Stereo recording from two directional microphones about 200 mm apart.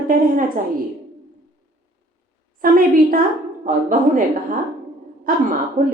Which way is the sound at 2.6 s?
45° right (ahead or behind).